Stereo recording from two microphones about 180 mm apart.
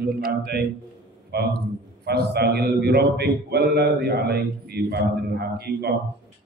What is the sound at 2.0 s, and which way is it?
Mantra, 65° right (ahead or behind).